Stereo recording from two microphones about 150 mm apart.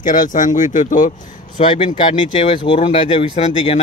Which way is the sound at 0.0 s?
65° left (ahead or behind).